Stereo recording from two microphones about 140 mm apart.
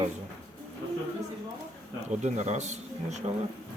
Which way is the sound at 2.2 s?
55° right (ahead or behind).